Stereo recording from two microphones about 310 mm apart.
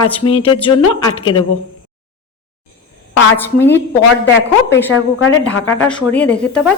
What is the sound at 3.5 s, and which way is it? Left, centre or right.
Speech, centre.